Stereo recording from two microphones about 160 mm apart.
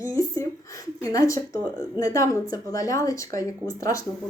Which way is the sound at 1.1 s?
20° left (ahead or behind).